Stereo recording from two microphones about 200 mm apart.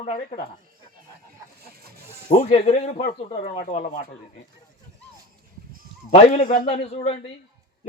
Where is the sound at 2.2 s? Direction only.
30° left (ahead or behind).